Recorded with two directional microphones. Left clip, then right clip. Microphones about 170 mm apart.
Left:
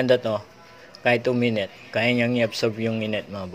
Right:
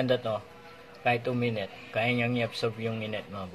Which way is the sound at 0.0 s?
40° left (ahead or behind).